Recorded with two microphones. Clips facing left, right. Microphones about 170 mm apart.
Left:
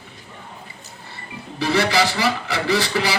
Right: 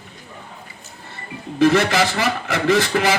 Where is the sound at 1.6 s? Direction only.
50° right (ahead or behind).